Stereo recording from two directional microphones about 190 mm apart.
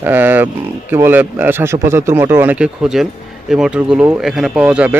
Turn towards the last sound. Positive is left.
turn(degrees=-5)  # may be behind; listen again after turning